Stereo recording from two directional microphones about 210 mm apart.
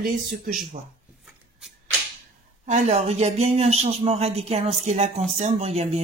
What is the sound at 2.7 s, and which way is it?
A man's voice, 35° right (ahead or behind).